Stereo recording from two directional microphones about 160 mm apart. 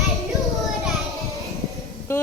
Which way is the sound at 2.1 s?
15° left (ahead or behind).